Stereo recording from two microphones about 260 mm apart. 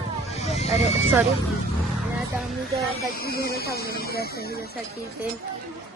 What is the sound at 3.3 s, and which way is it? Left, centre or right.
Speech, left.